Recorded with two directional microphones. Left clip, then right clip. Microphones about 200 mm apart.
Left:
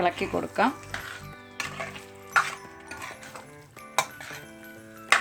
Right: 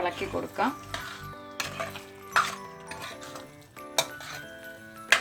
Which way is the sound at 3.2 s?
5° right (ahead or behind).